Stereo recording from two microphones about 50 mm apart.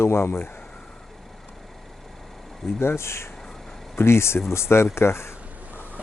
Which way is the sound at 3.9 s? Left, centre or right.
Left.